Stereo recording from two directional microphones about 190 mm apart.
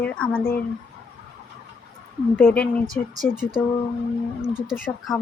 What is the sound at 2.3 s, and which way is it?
Speech, 10° left (ahead or behind).